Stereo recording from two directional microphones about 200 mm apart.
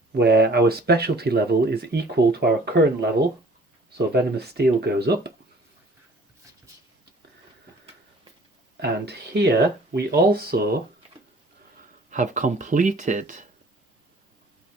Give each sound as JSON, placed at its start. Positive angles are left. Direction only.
{"t": 0.1, "sound": "speech", "side_deg": -55}
{"t": 8.8, "sound": "speech", "side_deg": -55}
{"t": 12.1, "sound": "speech", "side_deg": -40}